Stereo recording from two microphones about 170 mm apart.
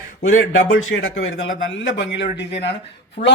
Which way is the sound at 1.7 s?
90° left.